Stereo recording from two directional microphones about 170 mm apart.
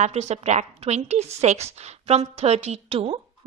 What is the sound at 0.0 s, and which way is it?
Speech, 40° right (ahead or behind).